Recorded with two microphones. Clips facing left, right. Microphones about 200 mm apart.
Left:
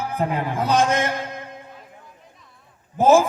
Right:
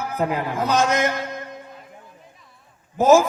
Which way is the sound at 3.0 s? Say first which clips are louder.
Right 1 dB; 30° left (ahead or behind).